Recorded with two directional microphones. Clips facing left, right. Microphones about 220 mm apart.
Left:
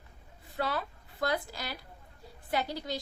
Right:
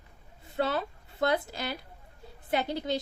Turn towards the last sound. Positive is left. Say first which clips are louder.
# right 4 dB
turn(degrees=-25)  # may be behind; listen again after turning